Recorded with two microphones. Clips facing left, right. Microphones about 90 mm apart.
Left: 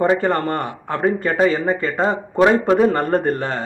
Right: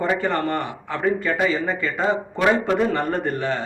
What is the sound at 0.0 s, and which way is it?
A man's voice, 40° left (ahead or behind).